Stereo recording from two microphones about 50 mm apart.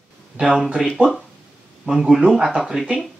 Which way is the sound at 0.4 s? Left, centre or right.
Centre.